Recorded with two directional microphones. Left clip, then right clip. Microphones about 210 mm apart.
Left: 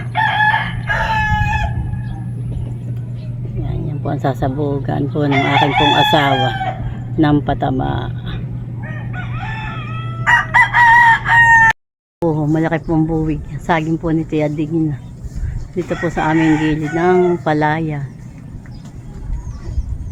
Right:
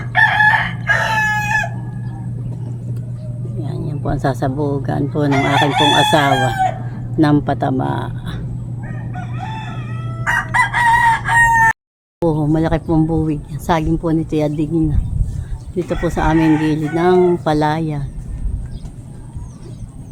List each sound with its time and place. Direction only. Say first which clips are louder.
0.1 s chicken: right 2 dB; 15° right (ahead or behind)
3.6 s speech: even; centre (ahead or behind)
5.7 s crowing: even; 15° left (ahead or behind)
6.0 s speech: even; centre (ahead or behind)
8.8 s chicken: left 3 dB; 40° right (ahead or behind)
10.2 s chicken: left 4 dB; 55° right (ahead or behind)
12.3 s speech: even; 10° right (ahead or behind)
15.7 s speech: even; 5° right (ahead or behind)